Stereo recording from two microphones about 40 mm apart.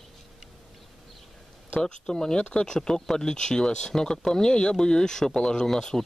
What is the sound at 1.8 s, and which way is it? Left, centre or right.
Speech, centre.